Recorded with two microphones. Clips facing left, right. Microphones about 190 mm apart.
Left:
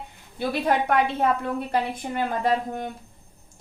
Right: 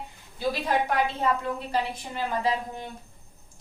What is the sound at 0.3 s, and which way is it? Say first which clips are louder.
A woman's voice: left 3 dB; 60° left (ahead or behind).